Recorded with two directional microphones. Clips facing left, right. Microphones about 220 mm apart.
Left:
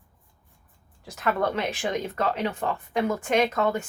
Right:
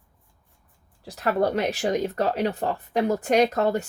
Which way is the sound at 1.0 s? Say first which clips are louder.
Right 3 dB; 35° right (ahead or behind).